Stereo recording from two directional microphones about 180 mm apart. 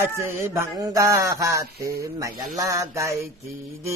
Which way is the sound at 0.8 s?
20° right (ahead or behind).